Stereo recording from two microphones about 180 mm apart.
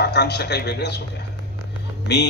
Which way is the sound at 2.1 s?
75° left (ahead or behind).